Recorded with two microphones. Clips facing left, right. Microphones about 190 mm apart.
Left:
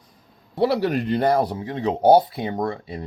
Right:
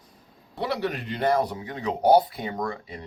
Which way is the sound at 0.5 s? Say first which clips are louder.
Left 8 dB; 35° left (ahead or behind).